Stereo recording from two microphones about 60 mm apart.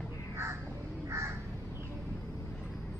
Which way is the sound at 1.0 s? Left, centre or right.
Right.